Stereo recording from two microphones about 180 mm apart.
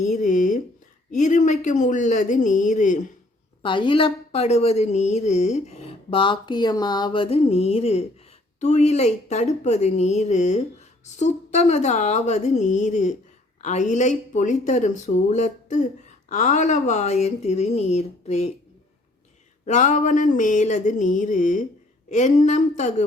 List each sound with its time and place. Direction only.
0.0 s a sound: 45° left (ahead or behind)
1.1 s mantra: 45° left (ahead or behind)
3.6 s a woman's voice: 30° left (ahead or behind)
19.6 s mantra: 40° left (ahead or behind)
22.1 s a woman's voice: 40° left (ahead or behind)